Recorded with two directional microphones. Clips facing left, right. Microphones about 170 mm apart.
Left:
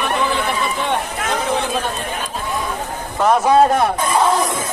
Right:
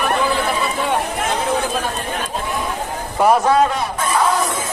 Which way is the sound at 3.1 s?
10° right (ahead or behind).